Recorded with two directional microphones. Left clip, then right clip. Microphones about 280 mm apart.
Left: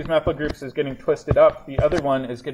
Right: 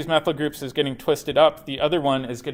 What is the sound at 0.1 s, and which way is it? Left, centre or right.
Speech, right.